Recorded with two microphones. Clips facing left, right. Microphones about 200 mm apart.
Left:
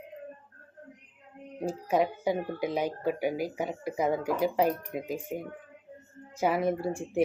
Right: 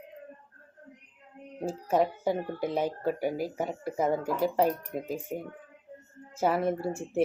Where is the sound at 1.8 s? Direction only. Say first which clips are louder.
Right 1 dB; 10° left (ahead or behind).